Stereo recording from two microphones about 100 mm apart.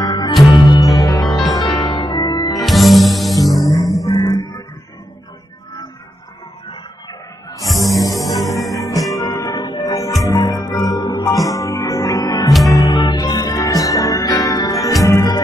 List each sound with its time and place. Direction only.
0.0 s music: 40° left (ahead or behind)
0.9 s music: 35° left (ahead or behind)
2.2 s music: 35° left (ahead or behind)
2.6 s music: centre (ahead or behind)
4.0 s music: 40° left (ahead or behind)
6.7 s music: 40° left (ahead or behind)
7.6 s music: centre (ahead or behind)
8.0 s music: 35° left (ahead or behind)
8.5 s music: centre (ahead or behind)
8.7 s music: 35° left (ahead or behind)